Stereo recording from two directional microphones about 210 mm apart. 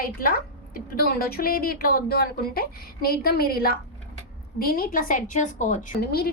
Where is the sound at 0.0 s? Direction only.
45° left (ahead or behind).